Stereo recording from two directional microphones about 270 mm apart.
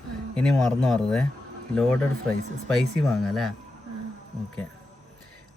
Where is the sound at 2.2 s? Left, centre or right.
Centre.